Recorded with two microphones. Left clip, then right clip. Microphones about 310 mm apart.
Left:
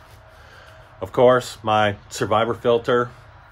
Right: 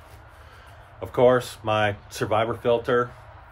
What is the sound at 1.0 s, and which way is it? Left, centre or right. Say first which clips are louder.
Speech: left 3 dB; left.